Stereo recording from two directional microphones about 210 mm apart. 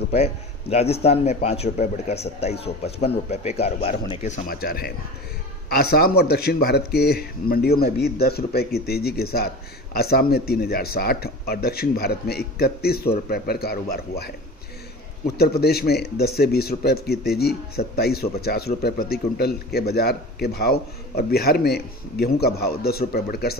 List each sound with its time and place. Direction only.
0.1 s a man's voice: 30° left (ahead or behind); by 23.5 s 45° left (ahead or behind)